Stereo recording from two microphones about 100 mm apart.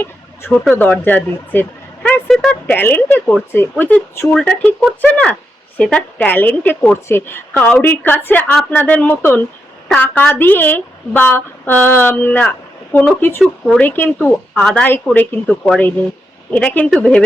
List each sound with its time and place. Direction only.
0.0 s a sound: 20° left (ahead or behind)
0.8 s speech: 15° left (ahead or behind)
2.2 s speech: 5° left (ahead or behind)
2.6 s a woman's voice: 20° left (ahead or behind)
14.6 s a woman's voice: 10° left (ahead or behind)
15.4 s speech: centre (ahead or behind)
16.5 s speech: 15° left (ahead or behind)